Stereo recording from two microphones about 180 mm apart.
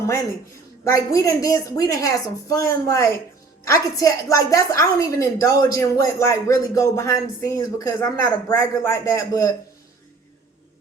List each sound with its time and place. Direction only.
0.9 s a woman's voice: 20° left (ahead or behind)